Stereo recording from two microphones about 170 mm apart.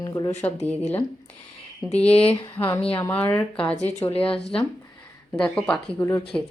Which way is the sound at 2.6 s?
20° left (ahead or behind).